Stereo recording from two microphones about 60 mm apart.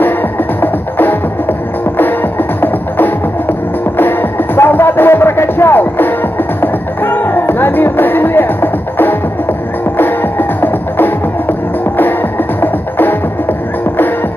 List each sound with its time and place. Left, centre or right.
0.6 s music: left
4.0 s music: left
12.9 s music: left